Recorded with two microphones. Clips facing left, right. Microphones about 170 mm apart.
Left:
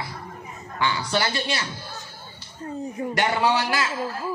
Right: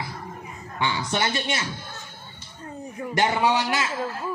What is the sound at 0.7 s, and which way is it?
Speech, 25° right (ahead or behind).